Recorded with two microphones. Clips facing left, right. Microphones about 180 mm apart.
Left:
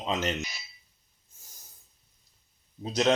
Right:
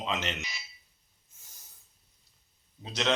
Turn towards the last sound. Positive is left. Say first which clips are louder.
# left 6 dB
turn(degrees=40)  # may be behind; listen again after turning